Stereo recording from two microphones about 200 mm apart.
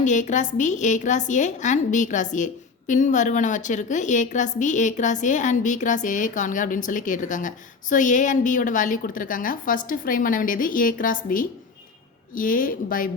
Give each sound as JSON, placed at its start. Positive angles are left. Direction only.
{"t": 0.0, "sound": "a woman's voice", "side_deg": 40}